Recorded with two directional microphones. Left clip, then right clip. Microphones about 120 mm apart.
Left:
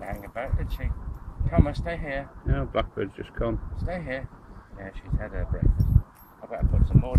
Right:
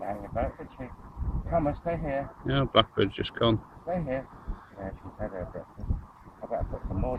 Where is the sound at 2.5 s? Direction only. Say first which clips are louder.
Right 5 dB; 15° right (ahead or behind).